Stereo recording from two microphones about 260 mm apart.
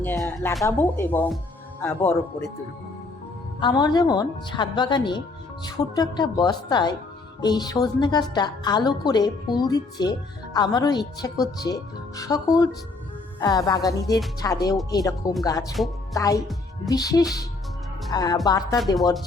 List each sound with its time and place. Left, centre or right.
0.0 s speech: centre
3.6 s speech: centre